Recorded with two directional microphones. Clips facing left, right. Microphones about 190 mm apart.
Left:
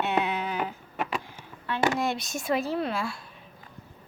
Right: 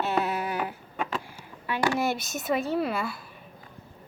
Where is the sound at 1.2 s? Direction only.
10° right (ahead or behind).